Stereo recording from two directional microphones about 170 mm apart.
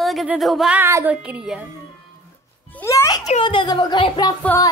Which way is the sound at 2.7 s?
15° left (ahead or behind).